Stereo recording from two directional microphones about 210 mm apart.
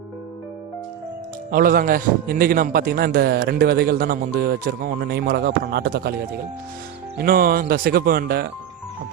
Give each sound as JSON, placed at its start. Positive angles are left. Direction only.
{"t": 1.5, "sound": "a man's voice", "side_deg": -45}
{"t": 7.2, "sound": "a man's voice", "side_deg": -45}